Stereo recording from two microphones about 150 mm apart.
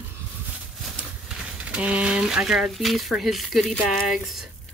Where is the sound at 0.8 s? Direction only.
Centre (ahead or behind).